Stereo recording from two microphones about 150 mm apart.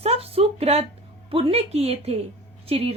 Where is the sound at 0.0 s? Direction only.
45° right (ahead or behind).